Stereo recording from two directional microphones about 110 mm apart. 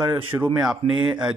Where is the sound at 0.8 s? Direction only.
60° right (ahead or behind).